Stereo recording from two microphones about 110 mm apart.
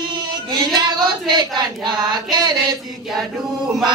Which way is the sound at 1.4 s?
40° right (ahead or behind).